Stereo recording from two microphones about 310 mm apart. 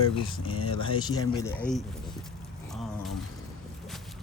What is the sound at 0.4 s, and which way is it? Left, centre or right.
Speech, left.